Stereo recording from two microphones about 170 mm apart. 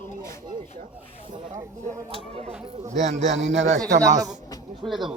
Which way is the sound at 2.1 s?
40° right (ahead or behind).